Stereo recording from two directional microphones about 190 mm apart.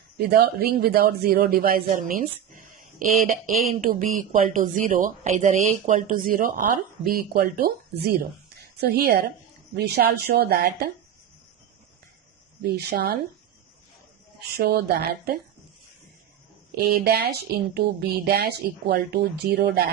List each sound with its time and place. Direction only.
0.2 s speech: 55° right (ahead or behind)
8.8 s speech: 55° right (ahead or behind)
12.7 s speech: 55° right (ahead or behind)
14.5 s speech: 55° right (ahead or behind)
16.7 s speech: 55° right (ahead or behind)